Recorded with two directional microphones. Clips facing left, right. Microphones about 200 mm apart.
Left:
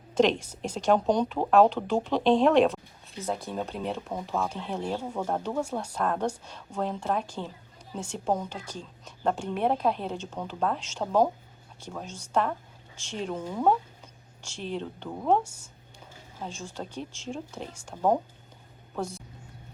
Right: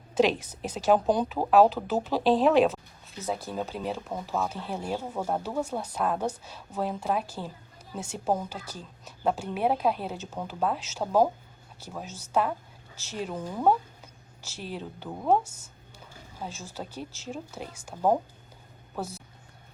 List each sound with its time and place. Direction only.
0.1 s a woman's voice: 5° right (ahead or behind)
16.4 s a woman's voice: 5° right (ahead or behind)